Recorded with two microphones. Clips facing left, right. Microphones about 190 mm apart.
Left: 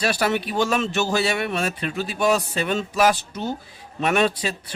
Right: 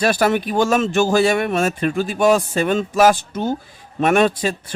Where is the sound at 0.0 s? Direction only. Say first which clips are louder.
Right 5 dB; 50° right (ahead or behind).